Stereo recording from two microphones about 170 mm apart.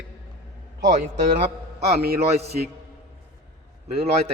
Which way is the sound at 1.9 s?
70° right (ahead or behind).